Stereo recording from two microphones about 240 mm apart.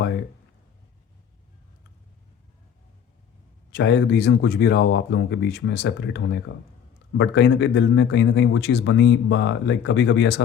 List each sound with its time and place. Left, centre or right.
3.7 s a man's voice: left